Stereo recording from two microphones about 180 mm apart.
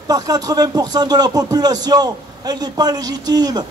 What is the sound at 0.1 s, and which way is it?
Speech, 20° right (ahead or behind).